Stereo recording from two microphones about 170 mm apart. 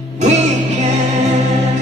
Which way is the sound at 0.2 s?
40° right (ahead or behind).